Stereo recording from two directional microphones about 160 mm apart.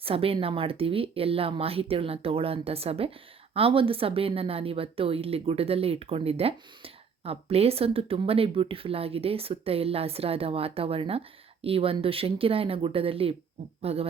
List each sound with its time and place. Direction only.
0.0 s a woman's voice: 35° right (ahead or behind)